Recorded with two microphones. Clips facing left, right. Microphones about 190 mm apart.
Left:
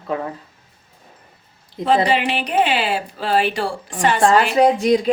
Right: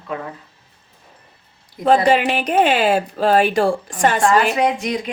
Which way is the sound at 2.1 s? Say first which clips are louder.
Right 4 dB; 45° right (ahead or behind).